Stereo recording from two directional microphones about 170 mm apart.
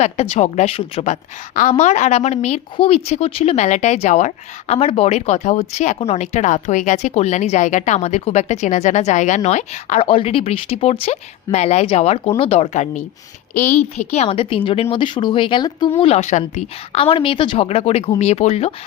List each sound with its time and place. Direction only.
0.0 s a woman's voice: 40° left (ahead or behind)
10.0 s a woman's voice: 35° left (ahead or behind)
16.0 s a woman's voice: 35° left (ahead or behind)